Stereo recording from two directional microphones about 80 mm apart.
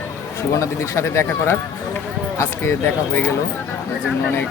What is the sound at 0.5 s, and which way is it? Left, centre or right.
Speech, left.